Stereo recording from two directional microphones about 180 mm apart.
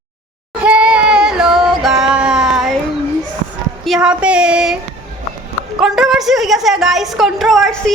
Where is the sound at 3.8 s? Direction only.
Centre (ahead or behind).